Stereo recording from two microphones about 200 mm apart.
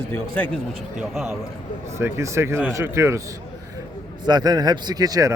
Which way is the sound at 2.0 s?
15° right (ahead or behind).